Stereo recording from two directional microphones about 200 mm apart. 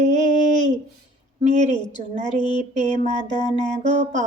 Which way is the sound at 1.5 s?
35° right (ahead or behind).